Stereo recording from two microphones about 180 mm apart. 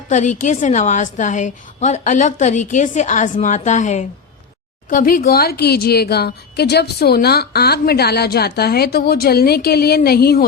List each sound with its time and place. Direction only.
0.1 s a woman's voice: 40° left (ahead or behind); by 10.4 s 60° left (ahead or behind)